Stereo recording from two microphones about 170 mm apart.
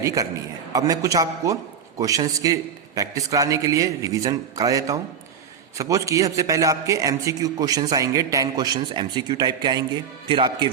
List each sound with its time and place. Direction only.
0.0 s a man's voice: 20° right (ahead or behind)